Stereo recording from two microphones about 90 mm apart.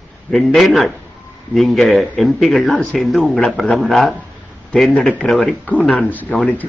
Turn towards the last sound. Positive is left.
turn(degrees=15)  # may be behind; listen again after turning